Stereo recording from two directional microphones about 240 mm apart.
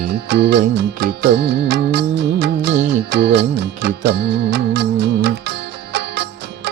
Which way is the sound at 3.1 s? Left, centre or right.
Right.